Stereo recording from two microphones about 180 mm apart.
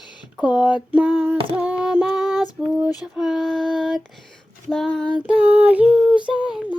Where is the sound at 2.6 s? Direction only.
5° right (ahead or behind).